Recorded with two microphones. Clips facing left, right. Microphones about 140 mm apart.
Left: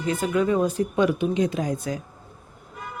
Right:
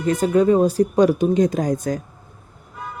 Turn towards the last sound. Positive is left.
turn(degrees=-45)  # may be behind; listen again after turning